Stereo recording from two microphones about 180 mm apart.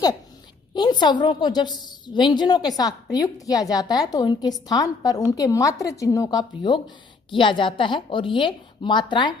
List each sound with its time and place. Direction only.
0.7 s a woman's voice: 25° left (ahead or behind)